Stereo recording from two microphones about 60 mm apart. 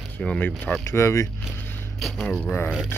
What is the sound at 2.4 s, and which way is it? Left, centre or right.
Speech, left.